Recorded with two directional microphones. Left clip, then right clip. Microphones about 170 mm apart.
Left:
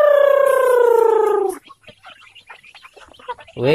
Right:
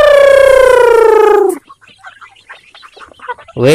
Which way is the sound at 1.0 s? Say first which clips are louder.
Right 9 dB; 60° right (ahead or behind).